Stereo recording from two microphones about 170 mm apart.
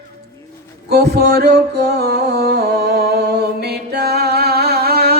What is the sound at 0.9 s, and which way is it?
Music, 75° right (ahead or behind).